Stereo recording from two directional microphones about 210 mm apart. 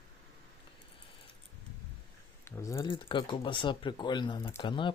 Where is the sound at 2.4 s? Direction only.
15° left (ahead or behind).